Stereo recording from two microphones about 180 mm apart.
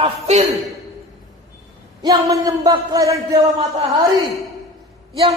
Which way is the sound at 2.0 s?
20° right (ahead or behind).